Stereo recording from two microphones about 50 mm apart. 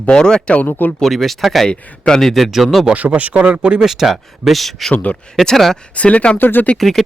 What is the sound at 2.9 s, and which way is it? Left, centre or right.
Speech, right.